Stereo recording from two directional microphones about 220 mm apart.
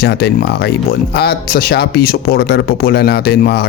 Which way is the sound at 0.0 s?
50° left (ahead or behind).